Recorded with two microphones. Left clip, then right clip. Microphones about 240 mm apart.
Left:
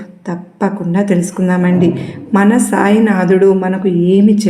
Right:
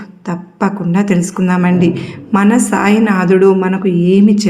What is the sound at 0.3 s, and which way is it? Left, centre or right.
A woman's voice, right.